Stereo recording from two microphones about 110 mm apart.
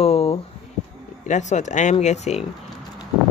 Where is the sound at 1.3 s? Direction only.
90° left.